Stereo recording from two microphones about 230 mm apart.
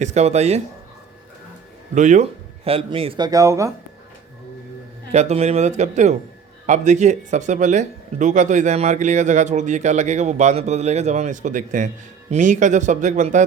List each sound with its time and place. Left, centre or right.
0.0 s speech: right
2.0 s speech: right; by 3.7 s centre
5.1 s speech: right